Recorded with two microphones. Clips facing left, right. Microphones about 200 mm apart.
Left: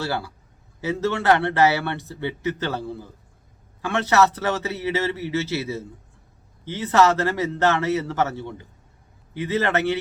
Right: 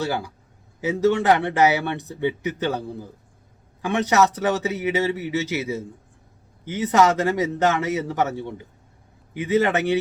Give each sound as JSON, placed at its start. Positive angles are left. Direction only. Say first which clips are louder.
{"t": 0.0, "sound": "speech", "louder": "right 2 dB", "side_deg": -15}